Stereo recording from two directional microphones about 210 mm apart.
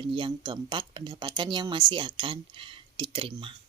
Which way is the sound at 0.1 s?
25° right (ahead or behind).